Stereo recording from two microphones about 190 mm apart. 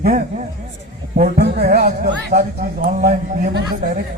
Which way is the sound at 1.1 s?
55° right (ahead or behind).